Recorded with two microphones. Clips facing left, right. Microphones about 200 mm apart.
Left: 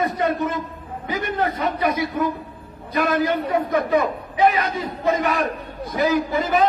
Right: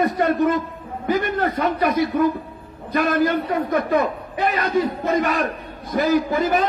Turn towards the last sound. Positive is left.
turn(degrees=-50)  # may be behind; listen again after turning